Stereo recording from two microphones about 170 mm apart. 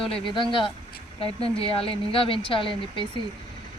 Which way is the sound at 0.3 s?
30° left (ahead or behind).